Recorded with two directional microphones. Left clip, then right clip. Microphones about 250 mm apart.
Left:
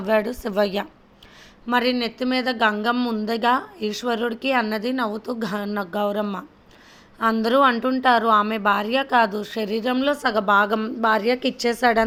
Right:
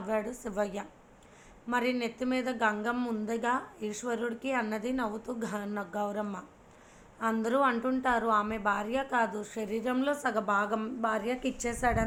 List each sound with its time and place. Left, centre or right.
0.1 s a woman's voice: left
7.4 s speech: left